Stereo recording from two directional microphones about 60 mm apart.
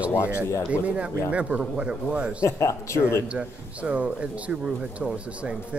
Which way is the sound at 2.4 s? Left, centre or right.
Left.